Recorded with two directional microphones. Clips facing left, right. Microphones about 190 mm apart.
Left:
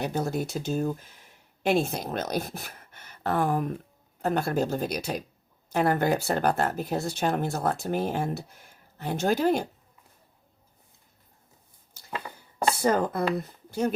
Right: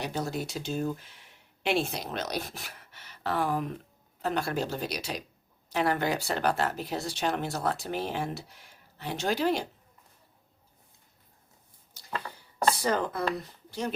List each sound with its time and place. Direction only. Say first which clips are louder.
0.1 s speech: left 4 dB; 50° left (ahead or behind)
12.1 s a sound: left 1 dB; 10° left (ahead or behind)
12.8 s speech: left 4 dB; 50° left (ahead or behind)